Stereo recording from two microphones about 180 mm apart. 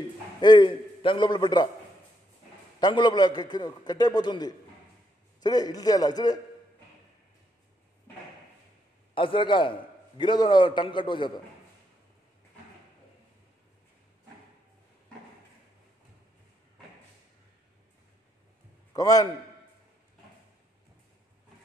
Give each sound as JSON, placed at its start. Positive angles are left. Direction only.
{"t": 0.4, "sound": "a man's voice", "side_deg": 25}
{"t": 2.8, "sound": "a man's voice", "side_deg": 25}
{"t": 9.1, "sound": "a man's voice", "side_deg": 30}
{"t": 18.9, "sound": "a man's voice", "side_deg": 20}